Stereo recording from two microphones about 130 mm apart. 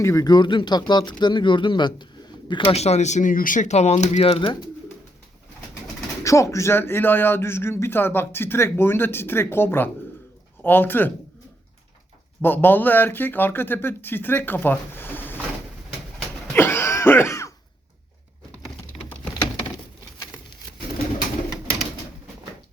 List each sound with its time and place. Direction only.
0.0 s speech: 25° left (ahead or behind)
2.7 s speech: 55° left (ahead or behind)
6.2 s a man's voice: 25° left (ahead or behind)
12.4 s a man's voice: 15° left (ahead or behind)
16.6 s cough: 20° left (ahead or behind)